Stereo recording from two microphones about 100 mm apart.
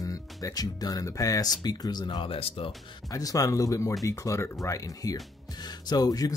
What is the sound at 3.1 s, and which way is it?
Speech, 35° left (ahead or behind).